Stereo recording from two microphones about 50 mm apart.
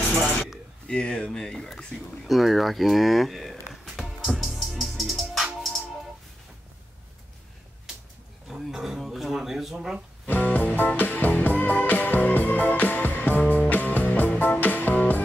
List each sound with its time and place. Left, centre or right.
0.8 s speech: centre
2.2 s speech: centre
3.8 s music: centre
8.5 s a sound: centre
10.2 s music: left